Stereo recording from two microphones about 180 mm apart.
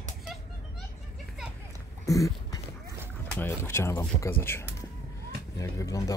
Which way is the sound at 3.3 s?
10° left (ahead or behind).